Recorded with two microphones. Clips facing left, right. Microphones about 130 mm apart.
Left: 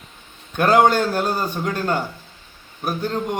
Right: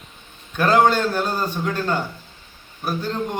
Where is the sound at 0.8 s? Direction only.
10° left (ahead or behind).